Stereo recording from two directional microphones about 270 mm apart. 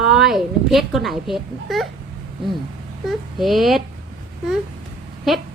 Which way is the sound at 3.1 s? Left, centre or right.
Centre.